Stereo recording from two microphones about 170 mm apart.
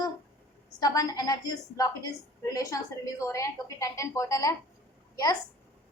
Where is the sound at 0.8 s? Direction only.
20° left (ahead or behind).